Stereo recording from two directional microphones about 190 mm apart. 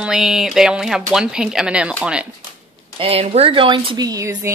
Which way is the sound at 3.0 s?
30° right (ahead or behind).